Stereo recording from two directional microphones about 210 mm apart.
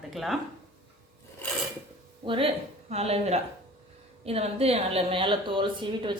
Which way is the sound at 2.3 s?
25° right (ahead or behind).